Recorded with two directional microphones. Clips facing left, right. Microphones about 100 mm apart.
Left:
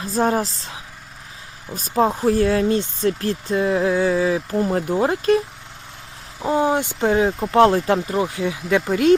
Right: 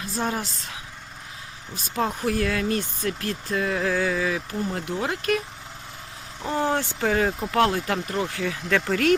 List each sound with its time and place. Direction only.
0.0 s speech: 40° left (ahead or behind)
2.0 s speech: 30° left (ahead or behind)
4.6 s speech: 40° left (ahead or behind)
6.5 s speech: 15° left (ahead or behind)
7.2 s speech: 5° left (ahead or behind)
7.5 s speech: 30° left (ahead or behind)
8.1 s speech: 15° left (ahead or behind)